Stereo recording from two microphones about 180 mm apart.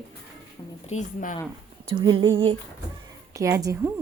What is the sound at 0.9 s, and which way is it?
Speech, 45° left (ahead or behind).